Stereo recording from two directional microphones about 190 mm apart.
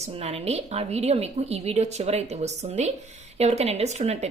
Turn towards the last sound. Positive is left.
turn(degrees=-35)  # may be behind; listen again after turning